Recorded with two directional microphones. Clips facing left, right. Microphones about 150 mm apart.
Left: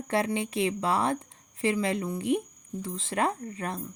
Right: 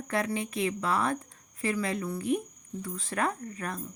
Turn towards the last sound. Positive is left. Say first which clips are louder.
# left 2 dB
turn(degrees=25)  # may be behind; listen again after turning